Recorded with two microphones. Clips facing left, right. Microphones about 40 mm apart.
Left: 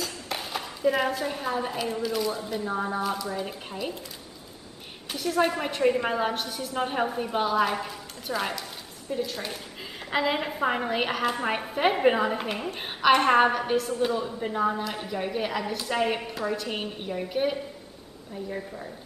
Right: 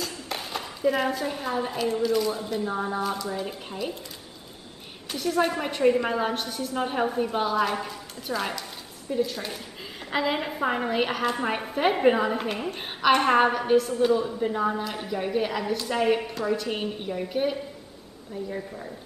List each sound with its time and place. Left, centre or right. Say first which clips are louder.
0.0 s a sound: even; centre
2.0 s a woman's voice: right 3 dB; centre
2.6 s speech: even; centre
2.9 s a woman's voice: even; centre
5.1 s a woman's voice: even; centre